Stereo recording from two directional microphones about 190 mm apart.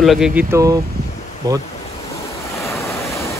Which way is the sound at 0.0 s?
Centre (ahead or behind).